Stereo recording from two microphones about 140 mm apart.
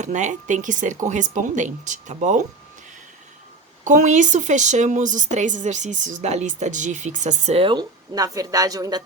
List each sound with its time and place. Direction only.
0.0 s a woman's voice: 60° right (ahead or behind)
3.8 s a woman's voice: 60° right (ahead or behind); by 9.0 s 25° right (ahead or behind)